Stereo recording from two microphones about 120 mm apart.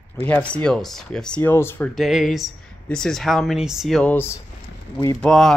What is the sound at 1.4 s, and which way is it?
Speech, 20° left (ahead or behind).